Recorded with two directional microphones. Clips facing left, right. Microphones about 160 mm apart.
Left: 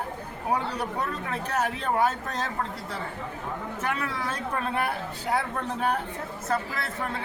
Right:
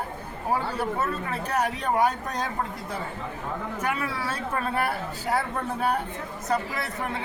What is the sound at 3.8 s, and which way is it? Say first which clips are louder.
Speech: right 1 dB; 10° right (ahead or behind).